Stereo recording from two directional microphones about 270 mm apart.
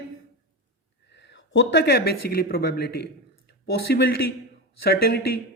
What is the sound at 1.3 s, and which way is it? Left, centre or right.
Speech, left.